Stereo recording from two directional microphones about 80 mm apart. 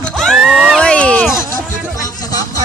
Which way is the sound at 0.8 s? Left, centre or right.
Centre.